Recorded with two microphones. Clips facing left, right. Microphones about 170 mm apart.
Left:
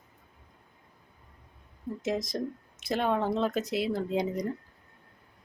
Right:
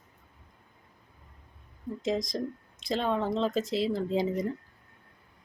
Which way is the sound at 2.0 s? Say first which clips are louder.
Right 1 dB; 5° left (ahead or behind).